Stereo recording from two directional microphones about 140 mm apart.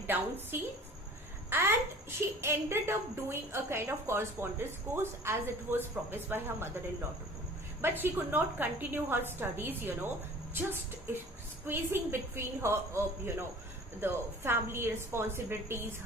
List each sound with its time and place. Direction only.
0.1 s a woman's voice: 15° right (ahead or behind)
7.8 s a woman's voice: 15° right (ahead or behind)